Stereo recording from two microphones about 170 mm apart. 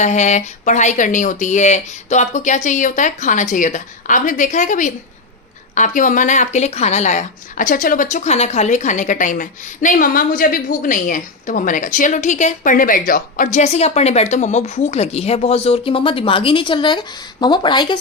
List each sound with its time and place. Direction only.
0.0 s a woman's voice: 45° left (ahead or behind); by 18.0 s 25° left (ahead or behind)